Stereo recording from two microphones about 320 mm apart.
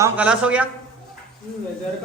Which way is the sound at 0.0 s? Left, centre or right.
Centre.